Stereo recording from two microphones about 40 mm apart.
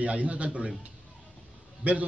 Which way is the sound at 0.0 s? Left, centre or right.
Right.